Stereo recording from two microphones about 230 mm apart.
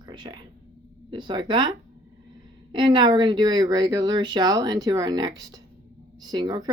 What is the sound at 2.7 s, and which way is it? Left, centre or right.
Speech, centre.